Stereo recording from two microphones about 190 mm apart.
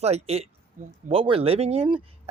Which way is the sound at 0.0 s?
35° right (ahead or behind).